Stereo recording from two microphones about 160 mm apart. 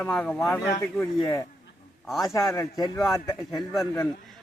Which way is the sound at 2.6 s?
20° left (ahead or behind).